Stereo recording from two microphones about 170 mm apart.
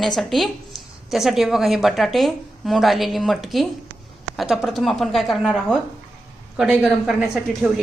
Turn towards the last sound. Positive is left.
turn(degrees=-5)  # may be behind; listen again after turning